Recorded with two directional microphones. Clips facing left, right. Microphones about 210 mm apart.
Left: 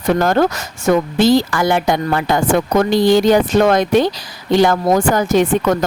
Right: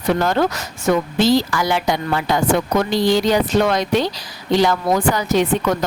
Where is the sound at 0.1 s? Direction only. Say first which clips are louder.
Left 3 dB; 50° left (ahead or behind).